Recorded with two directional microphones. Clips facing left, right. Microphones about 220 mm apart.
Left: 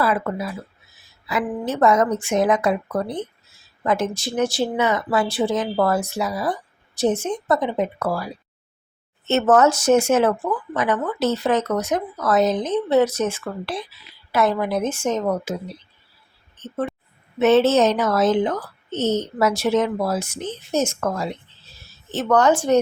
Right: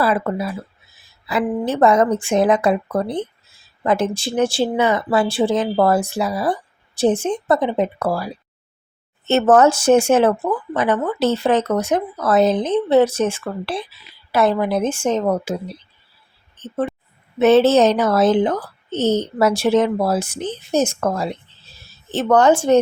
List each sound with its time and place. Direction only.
0.0 s speech: 30° right (ahead or behind)
16.6 s a sound: 30° right (ahead or behind)
17.4 s speech: 35° right (ahead or behind)